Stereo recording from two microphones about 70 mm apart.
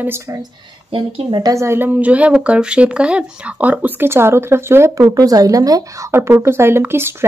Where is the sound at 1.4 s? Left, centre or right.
Right.